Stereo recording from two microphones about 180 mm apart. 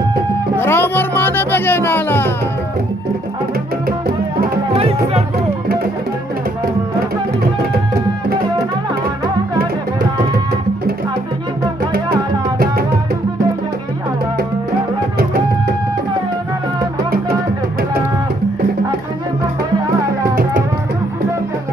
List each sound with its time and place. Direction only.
0.6 s speech: 15° left (ahead or behind)
4.7 s music: 35° right (ahead or behind)